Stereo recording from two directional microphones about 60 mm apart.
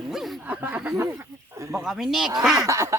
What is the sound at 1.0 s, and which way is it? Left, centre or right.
Snake, right.